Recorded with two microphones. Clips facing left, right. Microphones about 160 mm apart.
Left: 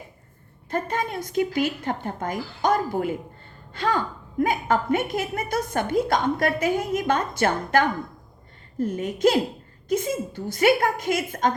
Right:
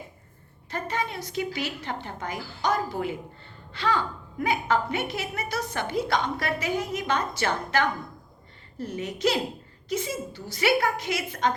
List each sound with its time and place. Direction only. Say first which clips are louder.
0.7 s a woman's voice: left 4 dB; 50° left (ahead or behind)